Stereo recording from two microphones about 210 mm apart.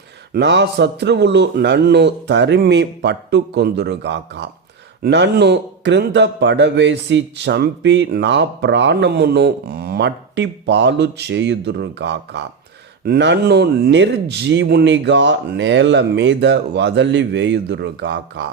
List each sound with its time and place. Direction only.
0.3 s a man's voice: 55° right (ahead or behind)